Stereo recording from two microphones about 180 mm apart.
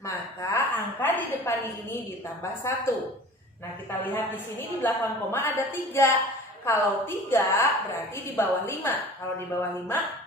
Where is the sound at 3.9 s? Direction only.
10° left (ahead or behind).